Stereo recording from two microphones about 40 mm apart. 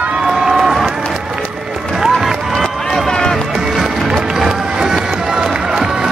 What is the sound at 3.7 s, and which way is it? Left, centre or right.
Music, centre.